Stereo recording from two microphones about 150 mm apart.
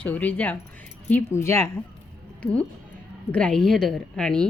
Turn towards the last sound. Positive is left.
turn(degrees=5)  # may be behind; listen again after turning